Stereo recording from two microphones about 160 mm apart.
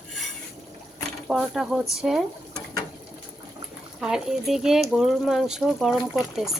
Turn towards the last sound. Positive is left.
turn(degrees=-5)  # may be behind; listen again after turning